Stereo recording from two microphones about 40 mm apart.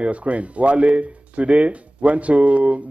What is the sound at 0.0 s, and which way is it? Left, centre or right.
Speech, right.